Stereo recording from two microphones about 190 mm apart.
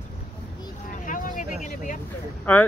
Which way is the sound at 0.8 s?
45° left (ahead or behind).